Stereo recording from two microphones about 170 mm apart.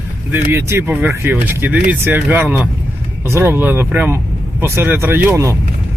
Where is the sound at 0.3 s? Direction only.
15° right (ahead or behind).